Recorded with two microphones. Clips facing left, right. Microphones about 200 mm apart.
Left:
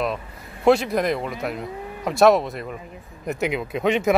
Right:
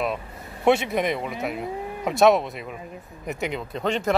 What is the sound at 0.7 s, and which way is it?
Speech, centre (ahead or behind).